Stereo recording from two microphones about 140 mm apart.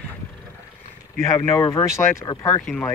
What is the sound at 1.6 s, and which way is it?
Speech, 25° left (ahead or behind).